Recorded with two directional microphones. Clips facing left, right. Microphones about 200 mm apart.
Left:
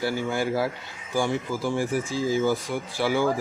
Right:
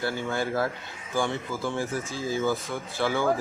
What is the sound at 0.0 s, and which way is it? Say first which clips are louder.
A man's voice: left 3 dB; 10° left (ahead or behind).